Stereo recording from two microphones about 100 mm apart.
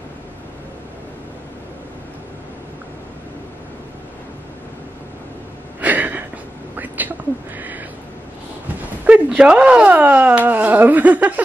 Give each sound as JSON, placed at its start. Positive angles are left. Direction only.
{"t": 5.8, "sound": "a sound", "side_deg": -15}
{"t": 6.8, "sound": "whispering", "side_deg": -15}
{"t": 9.0, "sound": "speech", "side_deg": -15}